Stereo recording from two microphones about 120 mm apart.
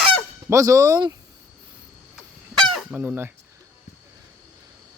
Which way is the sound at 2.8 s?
10° right (ahead or behind).